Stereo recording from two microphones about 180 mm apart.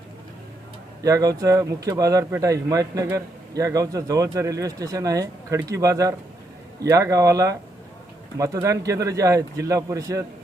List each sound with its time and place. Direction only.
1.0 s speech: 20° right (ahead or behind)